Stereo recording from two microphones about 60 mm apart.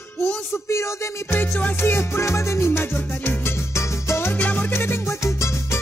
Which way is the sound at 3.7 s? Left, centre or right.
Left.